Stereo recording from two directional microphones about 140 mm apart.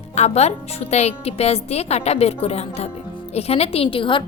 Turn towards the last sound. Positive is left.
turn(degrees=35)  # may be behind; listen again after turning